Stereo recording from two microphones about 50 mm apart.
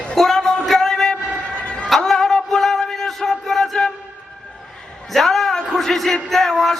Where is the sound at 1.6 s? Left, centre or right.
Centre.